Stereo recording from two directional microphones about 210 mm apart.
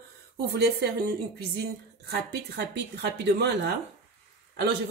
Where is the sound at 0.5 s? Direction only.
50° right (ahead or behind).